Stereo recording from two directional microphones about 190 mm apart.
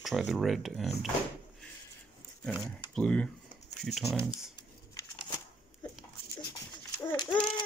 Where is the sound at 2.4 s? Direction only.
5° left (ahead or behind).